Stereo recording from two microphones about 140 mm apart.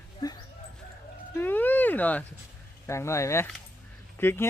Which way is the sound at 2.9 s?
20° left (ahead or behind).